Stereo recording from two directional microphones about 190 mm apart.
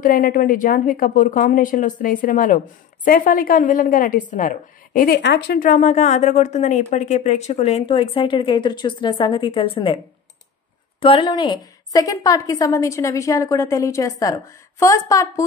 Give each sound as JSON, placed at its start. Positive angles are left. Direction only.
{"t": 0.0, "sound": "a woman's voice", "side_deg": 45}
{"t": 5.6, "sound": "speech", "side_deg": 45}
{"t": 11.0, "sound": "a woman's voice", "side_deg": 30}